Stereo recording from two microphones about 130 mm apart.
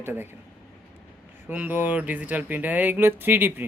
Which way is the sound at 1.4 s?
15° right (ahead or behind).